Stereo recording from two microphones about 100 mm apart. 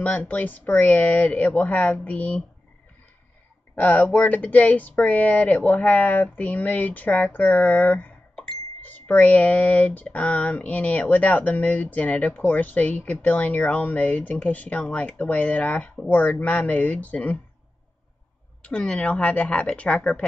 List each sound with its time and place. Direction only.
0.0 s speech: 15° left (ahead or behind)
3.7 s speech: 20° left (ahead or behind)
18.6 s speech: 10° left (ahead or behind)